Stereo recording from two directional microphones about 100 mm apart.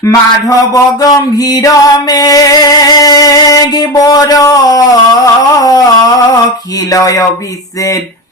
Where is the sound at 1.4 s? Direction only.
40° left (ahead or behind).